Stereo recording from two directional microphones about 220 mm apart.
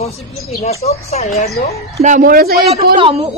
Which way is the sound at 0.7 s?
30° left (ahead or behind).